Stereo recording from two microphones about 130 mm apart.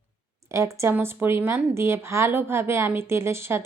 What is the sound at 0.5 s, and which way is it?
A woman's voice, 20° right (ahead or behind).